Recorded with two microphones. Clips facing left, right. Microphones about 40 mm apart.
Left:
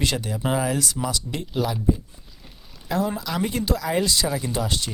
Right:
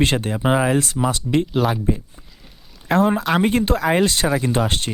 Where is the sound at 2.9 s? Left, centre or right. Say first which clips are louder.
Right 8 dB; right.